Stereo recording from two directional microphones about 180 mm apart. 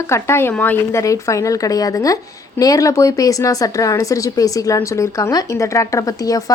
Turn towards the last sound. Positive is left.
turn(degrees=20)  # may be behind; listen again after turning